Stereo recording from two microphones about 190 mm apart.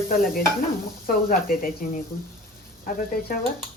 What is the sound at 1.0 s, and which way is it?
Speech, 50° left (ahead or behind).